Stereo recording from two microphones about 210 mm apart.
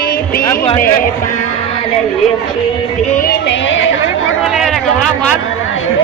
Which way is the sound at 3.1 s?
45° left (ahead or behind).